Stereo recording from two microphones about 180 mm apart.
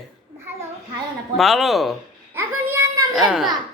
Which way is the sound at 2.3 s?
15° right (ahead or behind).